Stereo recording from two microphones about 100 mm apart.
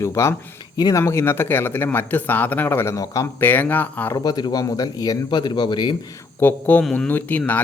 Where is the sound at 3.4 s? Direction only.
20° left (ahead or behind).